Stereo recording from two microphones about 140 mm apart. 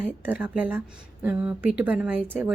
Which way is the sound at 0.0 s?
10° right (ahead or behind).